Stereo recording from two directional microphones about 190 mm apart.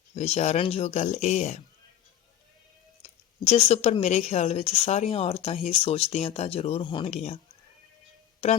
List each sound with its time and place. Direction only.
0.1 s speech: 35° left (ahead or behind)
3.0 s speech: 35° left (ahead or behind)